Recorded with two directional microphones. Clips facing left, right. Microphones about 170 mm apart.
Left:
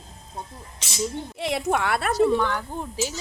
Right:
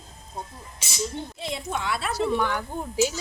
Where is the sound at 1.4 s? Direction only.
70° left (ahead or behind).